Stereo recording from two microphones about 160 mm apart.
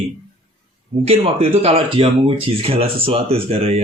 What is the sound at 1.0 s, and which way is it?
Speech, 40° right (ahead or behind).